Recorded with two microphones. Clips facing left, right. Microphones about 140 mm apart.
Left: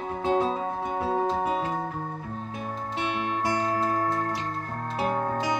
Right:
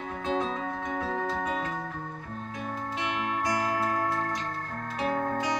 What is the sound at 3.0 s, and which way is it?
Music, 25° left (ahead or behind).